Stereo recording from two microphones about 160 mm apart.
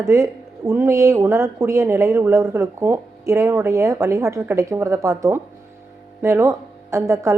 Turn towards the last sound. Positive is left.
turn(degrees=-20)  # may be behind; listen again after turning